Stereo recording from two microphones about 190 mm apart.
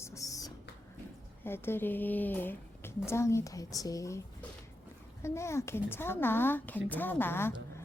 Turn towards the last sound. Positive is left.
turn(degrees=10)  # may be behind; listen again after turning